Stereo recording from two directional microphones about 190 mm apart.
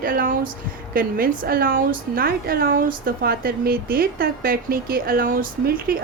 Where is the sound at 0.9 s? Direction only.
50° right (ahead or behind).